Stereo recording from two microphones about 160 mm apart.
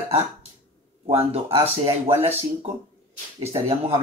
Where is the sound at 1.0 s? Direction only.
40° right (ahead or behind).